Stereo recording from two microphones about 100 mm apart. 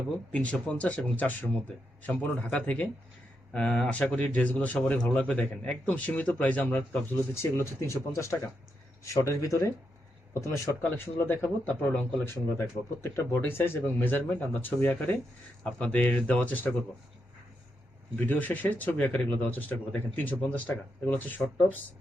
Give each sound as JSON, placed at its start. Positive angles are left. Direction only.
{"t": 0.3, "sound": "speech", "side_deg": 10}
{"t": 7.5, "sound": "speech", "side_deg": 30}
{"t": 18.2, "sound": "speech", "side_deg": 15}